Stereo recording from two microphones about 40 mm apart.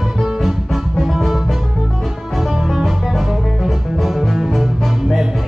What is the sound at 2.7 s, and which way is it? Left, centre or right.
Music, centre.